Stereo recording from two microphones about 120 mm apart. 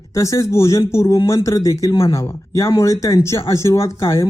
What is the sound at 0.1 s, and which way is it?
Speech, 25° left (ahead or behind).